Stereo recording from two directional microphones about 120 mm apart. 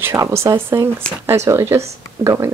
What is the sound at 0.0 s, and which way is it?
Speech, 20° right (ahead or behind).